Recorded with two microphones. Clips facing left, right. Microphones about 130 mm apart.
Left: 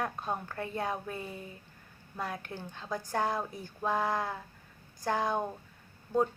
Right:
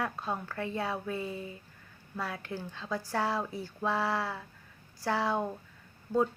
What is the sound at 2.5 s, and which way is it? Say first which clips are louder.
A woman's voice: right 2 dB; 20° left (ahead or behind).